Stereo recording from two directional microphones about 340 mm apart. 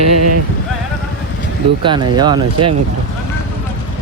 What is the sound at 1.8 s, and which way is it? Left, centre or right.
Speech, centre.